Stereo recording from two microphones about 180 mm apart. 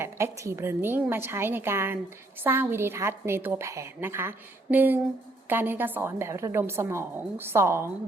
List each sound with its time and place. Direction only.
0.0 s a woman's voice: 15° right (ahead or behind)